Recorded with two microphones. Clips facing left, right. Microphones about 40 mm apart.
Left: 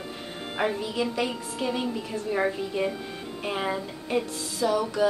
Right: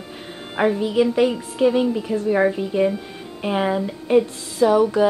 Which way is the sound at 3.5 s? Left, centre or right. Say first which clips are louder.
Right 8 dB; right.